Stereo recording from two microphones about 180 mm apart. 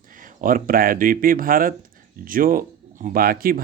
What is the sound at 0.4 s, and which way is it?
Speech, 50° right (ahead or behind).